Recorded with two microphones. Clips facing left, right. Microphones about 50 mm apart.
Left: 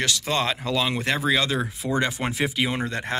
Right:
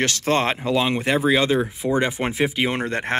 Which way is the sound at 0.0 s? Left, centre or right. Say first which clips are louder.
Right 4 dB; right.